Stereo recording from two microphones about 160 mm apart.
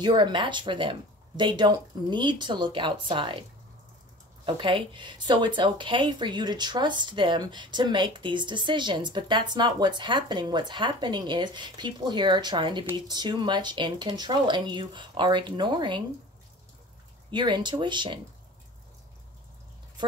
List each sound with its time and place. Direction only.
0.0 s speech: 30° right (ahead or behind)
4.5 s speech: 30° right (ahead or behind)
17.3 s speech: 30° right (ahead or behind)